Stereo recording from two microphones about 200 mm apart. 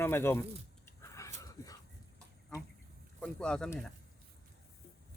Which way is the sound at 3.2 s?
5° left (ahead or behind).